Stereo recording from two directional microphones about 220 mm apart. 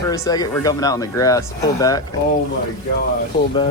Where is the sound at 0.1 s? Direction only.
15° left (ahead or behind).